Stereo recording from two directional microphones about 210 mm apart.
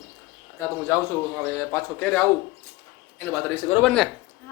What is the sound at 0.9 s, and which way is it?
Speech, 10° left (ahead or behind).